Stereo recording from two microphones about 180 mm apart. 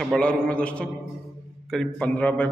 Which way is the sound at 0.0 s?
5° left (ahead or behind).